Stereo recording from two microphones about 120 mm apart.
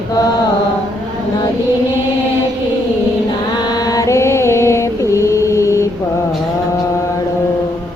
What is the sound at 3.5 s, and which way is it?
Mantra, 35° left (ahead or behind).